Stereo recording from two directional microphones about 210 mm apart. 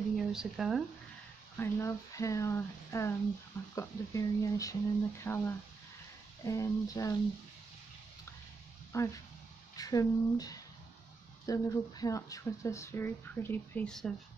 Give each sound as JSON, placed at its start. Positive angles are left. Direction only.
{"t": 0.1, "sound": "speech", "side_deg": 0}
{"t": 1.6, "sound": "speech", "side_deg": 15}
{"t": 8.9, "sound": "speech", "side_deg": 15}